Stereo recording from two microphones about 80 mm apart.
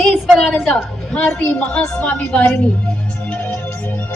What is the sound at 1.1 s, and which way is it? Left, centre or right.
A woman's voice, centre.